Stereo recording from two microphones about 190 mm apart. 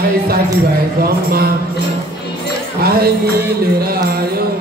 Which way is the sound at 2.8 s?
55° right (ahead or behind).